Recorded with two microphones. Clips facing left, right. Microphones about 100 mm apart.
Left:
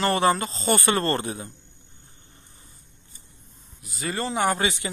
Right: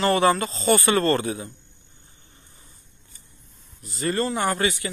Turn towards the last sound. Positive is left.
turn(degrees=20)  # may be behind; listen again after turning